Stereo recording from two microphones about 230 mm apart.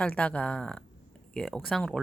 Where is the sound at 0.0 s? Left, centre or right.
Centre.